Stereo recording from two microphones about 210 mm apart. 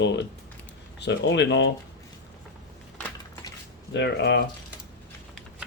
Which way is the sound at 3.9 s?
55° left (ahead or behind).